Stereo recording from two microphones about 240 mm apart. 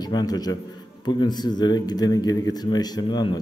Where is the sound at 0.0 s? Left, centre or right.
Centre.